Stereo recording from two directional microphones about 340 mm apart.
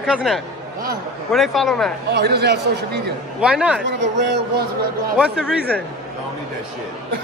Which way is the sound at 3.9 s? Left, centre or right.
Right.